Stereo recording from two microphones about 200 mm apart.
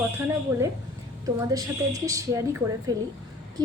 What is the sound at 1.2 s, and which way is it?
A woman's voice, 15° right (ahead or behind).